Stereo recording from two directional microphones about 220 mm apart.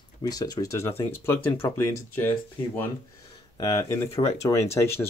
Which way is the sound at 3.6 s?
15° left (ahead or behind).